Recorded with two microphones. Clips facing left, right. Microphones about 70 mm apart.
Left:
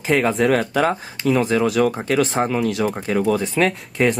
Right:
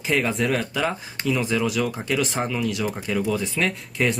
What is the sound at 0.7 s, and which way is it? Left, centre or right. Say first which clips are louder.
Speech: left 6 dB; left.